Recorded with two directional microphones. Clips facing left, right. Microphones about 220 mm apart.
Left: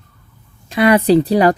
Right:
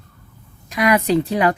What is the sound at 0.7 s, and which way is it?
Speech, 30° left (ahead or behind).